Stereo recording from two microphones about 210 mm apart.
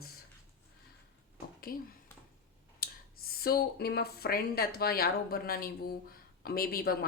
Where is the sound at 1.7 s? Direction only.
45° left (ahead or behind).